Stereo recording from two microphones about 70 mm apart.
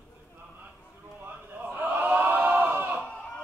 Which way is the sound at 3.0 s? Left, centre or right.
Centre.